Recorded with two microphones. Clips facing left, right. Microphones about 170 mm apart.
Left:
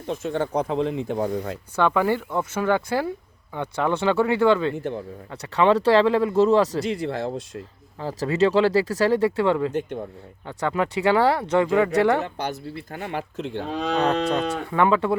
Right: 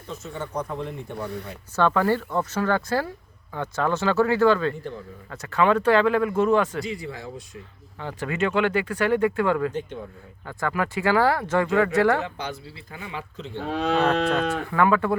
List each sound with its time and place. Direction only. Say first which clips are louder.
0.2 s speech: left 6 dB; 80° left
1.7 s speech: even; 15° left (ahead or behind)
4.8 s speech: left 6 dB; 65° left (ahead or behind)
5.5 s speech: left 2 dB; 30° left (ahead or behind)
6.8 s speech: left 7 dB; 80° left
7.9 s speech: left 5 dB; 35° left (ahead or behind); by 12.2 s 20° left (ahead or behind)
12.2 s speech: left 3 dB; 55° left (ahead or behind); by 13.6 s 75° left (ahead or behind)
13.7 s cattle: right 1 dB; 5° right (ahead or behind)
14.7 s speech: left 1 dB; 20° left (ahead or behind)